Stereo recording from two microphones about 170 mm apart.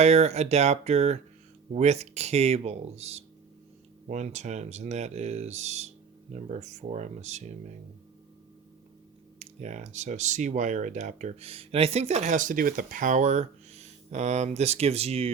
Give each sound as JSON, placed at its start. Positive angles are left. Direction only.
{"t": 0.0, "sound": "speech", "side_deg": -40}
{"t": 9.4, "sound": "speech", "side_deg": -45}